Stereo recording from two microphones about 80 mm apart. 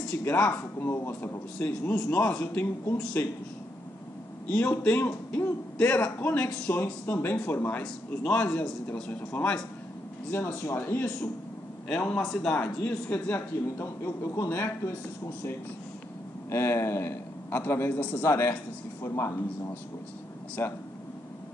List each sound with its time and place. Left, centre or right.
0.2 s a man's voice: left
1.7 s a man's voice: centre
4.5 s a man's voice: centre
5.8 s a man's voice: centre
6.2 s a man's voice: left
7.8 s a man's voice: centre
8.4 s a man's voice: centre
10.3 s a man's voice: left
11.9 s a man's voice: centre
12.5 s a man's voice: left
16.4 s a man's voice: left